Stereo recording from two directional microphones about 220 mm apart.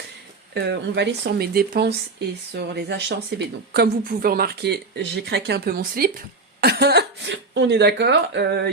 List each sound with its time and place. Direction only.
0.5 s a woman's voice: 50° right (ahead or behind)